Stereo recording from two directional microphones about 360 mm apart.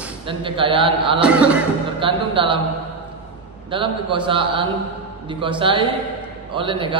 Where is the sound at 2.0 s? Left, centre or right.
Centre.